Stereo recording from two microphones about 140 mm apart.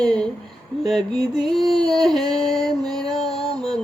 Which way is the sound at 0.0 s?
5° left (ahead or behind).